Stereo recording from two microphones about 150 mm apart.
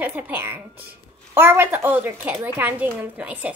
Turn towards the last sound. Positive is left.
turn(degrees=-10)  # may be behind; listen again after turning